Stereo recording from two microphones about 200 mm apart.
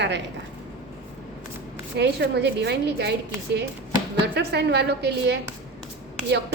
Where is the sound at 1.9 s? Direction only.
55° right (ahead or behind).